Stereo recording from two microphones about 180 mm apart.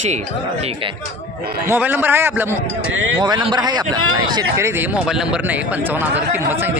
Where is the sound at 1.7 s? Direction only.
10° right (ahead or behind).